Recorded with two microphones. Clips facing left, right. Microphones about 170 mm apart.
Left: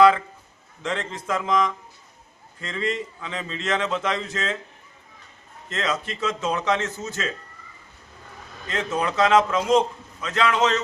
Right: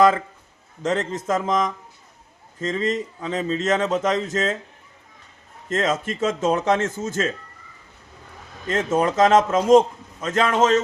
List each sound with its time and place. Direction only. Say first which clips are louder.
0.8 s a man's voice: right 6 dB; 45° right (ahead or behind)
5.6 s a man's voice: right 5 dB; 45° right (ahead or behind)
8.6 s a man's voice: right 5 dB; 45° right (ahead or behind)